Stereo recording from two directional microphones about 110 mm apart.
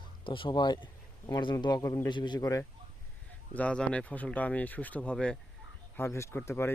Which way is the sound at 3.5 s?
10° left (ahead or behind).